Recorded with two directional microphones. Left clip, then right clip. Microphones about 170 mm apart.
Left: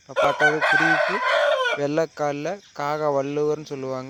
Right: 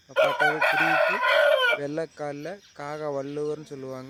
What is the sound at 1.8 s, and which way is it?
Speech, 20° left (ahead or behind).